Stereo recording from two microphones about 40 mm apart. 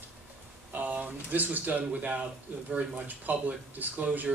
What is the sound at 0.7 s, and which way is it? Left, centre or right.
A man's voice, right.